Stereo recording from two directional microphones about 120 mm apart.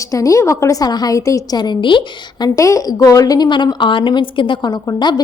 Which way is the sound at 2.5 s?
25° left (ahead or behind).